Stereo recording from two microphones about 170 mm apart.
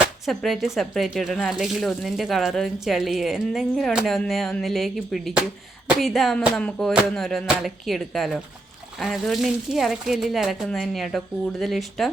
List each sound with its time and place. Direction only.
0.3 s speech: centre (ahead or behind)